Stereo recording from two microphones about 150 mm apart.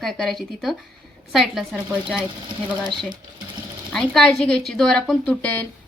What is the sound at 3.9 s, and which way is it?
Speech, 5° left (ahead or behind).